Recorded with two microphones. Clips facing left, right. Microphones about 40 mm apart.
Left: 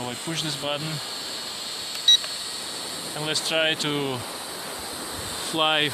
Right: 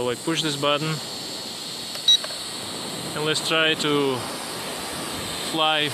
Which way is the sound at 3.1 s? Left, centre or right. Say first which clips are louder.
Right 3 dB; right.